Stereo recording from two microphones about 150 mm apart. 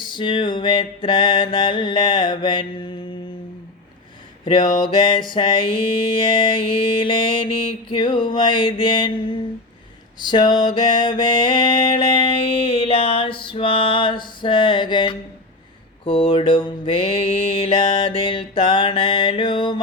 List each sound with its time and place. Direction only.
0.0 s mantra: 30° left (ahead or behind)
4.4 s mantra: 30° left (ahead or behind)
10.3 s music: 30° left (ahead or behind)
16.0 s mantra: 35° left (ahead or behind)